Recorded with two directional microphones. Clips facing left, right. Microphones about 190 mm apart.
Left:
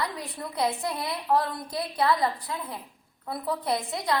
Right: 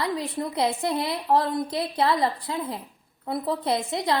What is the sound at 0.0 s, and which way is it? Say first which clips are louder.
A woman's voice: right 6 dB; 25° right (ahead or behind).